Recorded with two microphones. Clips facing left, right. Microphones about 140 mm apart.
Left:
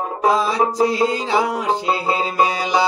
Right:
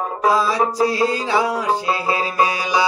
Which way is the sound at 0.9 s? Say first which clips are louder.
Left 1 dB; 20° left (ahead or behind).